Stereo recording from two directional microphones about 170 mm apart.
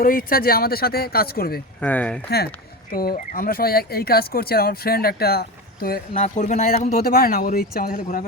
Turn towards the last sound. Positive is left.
turn(degrees=60)  # may be behind; listen again after turning